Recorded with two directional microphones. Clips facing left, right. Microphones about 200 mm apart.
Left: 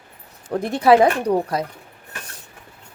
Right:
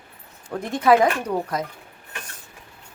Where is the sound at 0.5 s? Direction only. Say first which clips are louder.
Left 3 dB; 35° left (ahead or behind).